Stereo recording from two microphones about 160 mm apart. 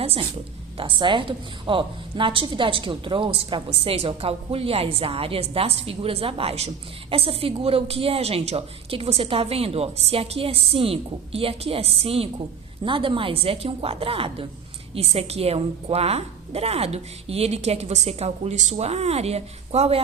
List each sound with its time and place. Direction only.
0.0 s a woman's voice: 35° right (ahead or behind)